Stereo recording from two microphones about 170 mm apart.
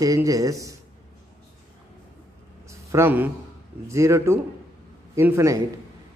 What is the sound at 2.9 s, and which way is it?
A man's voice, 15° right (ahead or behind).